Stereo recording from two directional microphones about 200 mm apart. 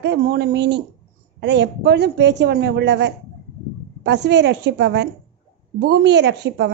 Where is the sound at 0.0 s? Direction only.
60° right (ahead or behind).